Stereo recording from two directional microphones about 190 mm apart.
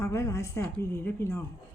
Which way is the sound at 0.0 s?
15° left (ahead or behind).